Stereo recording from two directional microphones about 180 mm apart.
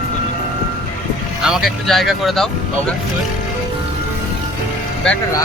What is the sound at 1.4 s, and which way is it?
Speech, centre (ahead or behind).